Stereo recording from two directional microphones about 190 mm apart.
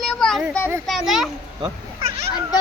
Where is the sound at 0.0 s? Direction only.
Centre (ahead or behind).